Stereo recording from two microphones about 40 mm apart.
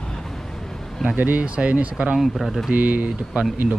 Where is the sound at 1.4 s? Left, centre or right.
Right.